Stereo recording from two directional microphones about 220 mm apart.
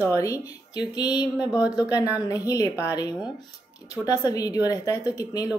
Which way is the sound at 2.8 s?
15° left (ahead or behind).